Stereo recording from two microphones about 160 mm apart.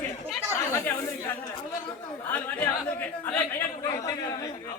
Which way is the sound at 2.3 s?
10° left (ahead or behind).